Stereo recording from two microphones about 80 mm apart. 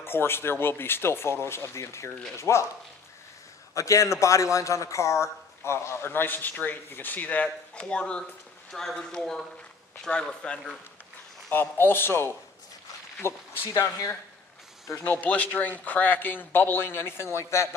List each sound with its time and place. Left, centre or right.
0.0 s speech: left
3.7 s a man's voice: left; by 10.8 s centre
11.5 s a man's voice: left
15.0 s a man's voice: left